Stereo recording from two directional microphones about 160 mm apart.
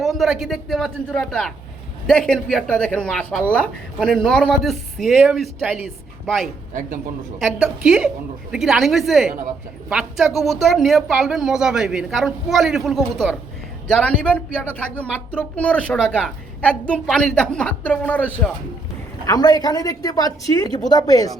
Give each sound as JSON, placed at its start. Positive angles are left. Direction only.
{"t": 0.0, "sound": "a woman's voice", "side_deg": 0}
{"t": 19.2, "sound": "a woman's voice", "side_deg": 25}